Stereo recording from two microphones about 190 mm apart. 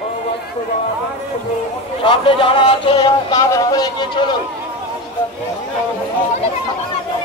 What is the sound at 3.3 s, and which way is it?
Speech, 15° left (ahead or behind).